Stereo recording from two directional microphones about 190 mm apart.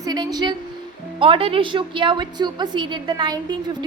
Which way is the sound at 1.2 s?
30° right (ahead or behind).